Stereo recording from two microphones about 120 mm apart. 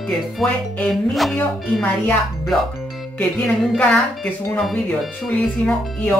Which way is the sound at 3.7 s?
10° left (ahead or behind).